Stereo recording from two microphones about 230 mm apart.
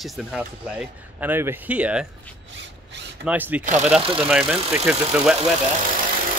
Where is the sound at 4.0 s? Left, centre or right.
Right.